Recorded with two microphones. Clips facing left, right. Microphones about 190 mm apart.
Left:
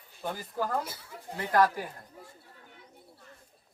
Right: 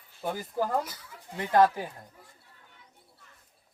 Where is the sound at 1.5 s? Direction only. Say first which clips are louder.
Right 3 dB; 25° right (ahead or behind).